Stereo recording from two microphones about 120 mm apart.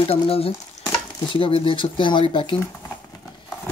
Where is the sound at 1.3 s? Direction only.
45° left (ahead or behind).